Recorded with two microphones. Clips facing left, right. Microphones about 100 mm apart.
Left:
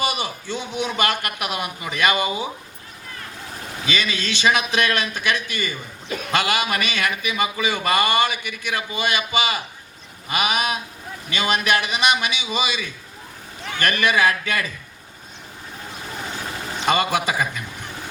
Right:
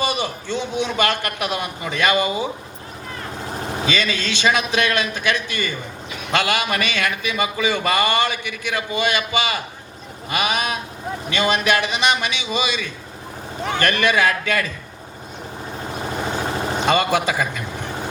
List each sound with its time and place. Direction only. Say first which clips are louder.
0.0 s a man's voice: right 2 dB; 10° left (ahead or behind)
3.9 s a man's voice: right 2 dB; 10° left (ahead or behind)
6.1 s a man's voice: left 3 dB; 45° left (ahead or behind)
6.3 s a man's voice: right 2 dB; 15° left (ahead or behind)
13.6 s a man's voice: right 7 dB; 30° right (ahead or behind)
13.8 s a man's voice: even; 10° left (ahead or behind)
15.9 s vehicle: right 7 dB; 45° right (ahead or behind)
16.8 s a man's voice: right 1 dB; 10° left (ahead or behind)